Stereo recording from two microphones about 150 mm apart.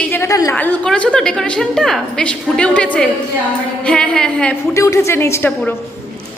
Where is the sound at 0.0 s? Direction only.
15° left (ahead or behind).